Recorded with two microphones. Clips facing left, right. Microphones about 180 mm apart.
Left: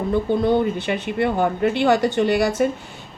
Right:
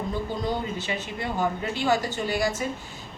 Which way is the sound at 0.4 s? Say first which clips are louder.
Left 10 dB; 60° left (ahead or behind).